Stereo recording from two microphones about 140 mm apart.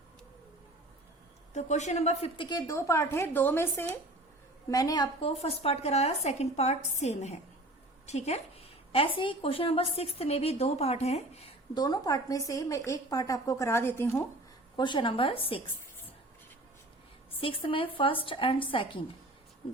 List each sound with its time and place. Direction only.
1.5 s a woman's voice: 55° left (ahead or behind); by 5.0 s 25° left (ahead or behind)
5.2 s a woman's voice: 45° left (ahead or behind)
11.7 s a woman's voice: 30° left (ahead or behind)
14.8 s speech: 35° left (ahead or behind)
17.4 s speech: 40° left (ahead or behind)